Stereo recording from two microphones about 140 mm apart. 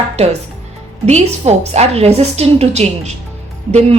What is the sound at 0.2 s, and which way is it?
A woman's voice, 50° right (ahead or behind).